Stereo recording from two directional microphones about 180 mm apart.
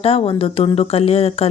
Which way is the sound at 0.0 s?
35° left (ahead or behind).